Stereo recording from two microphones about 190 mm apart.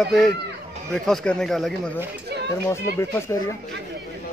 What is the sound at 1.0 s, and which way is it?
Speech, 5° left (ahead or behind).